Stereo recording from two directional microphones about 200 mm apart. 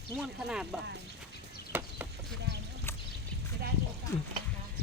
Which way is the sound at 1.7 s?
10° right (ahead or behind).